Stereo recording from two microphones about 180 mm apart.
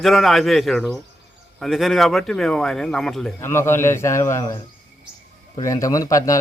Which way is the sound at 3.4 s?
15° left (ahead or behind).